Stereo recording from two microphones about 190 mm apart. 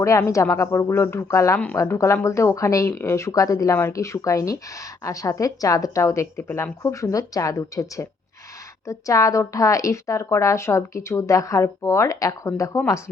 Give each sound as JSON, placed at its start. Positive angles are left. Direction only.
{"t": 0.0, "sound": "speech", "side_deg": 15}